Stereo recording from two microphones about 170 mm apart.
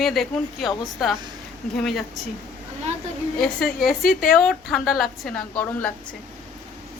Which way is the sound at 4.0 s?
55° left (ahead or behind).